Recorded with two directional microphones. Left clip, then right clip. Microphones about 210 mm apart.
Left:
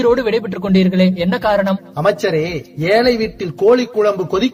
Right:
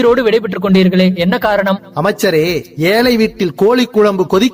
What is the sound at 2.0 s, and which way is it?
Speech, 50° right (ahead or behind).